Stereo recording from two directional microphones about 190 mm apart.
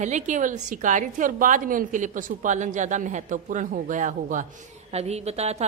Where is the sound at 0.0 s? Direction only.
40° right (ahead or behind).